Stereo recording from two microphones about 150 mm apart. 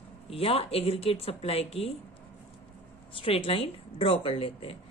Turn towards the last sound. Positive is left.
turn(degrees=40)  # may be behind; listen again after turning